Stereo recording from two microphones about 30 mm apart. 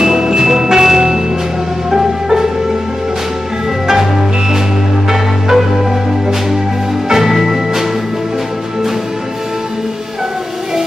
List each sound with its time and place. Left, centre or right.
0.0 s music: centre
3.8 s music: centre